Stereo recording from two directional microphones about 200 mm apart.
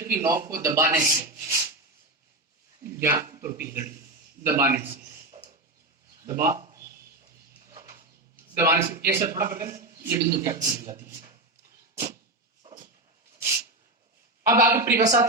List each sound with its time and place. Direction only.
0.0 s a man's voice: 15° right (ahead or behind)
2.8 s a man's voice: 15° right (ahead or behind)
5.4 s a sound: 20° right (ahead or behind)
8.5 s a man's voice: 10° right (ahead or behind)
14.5 s a man's voice: 15° right (ahead or behind)